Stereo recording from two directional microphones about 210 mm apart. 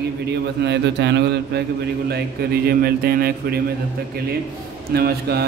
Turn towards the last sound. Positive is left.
turn(degrees=-50)  # may be behind; listen again after turning